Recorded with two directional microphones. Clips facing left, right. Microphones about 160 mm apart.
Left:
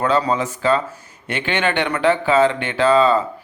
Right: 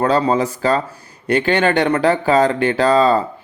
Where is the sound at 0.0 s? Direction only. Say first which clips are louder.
Right 3 dB; 35° right (ahead or behind).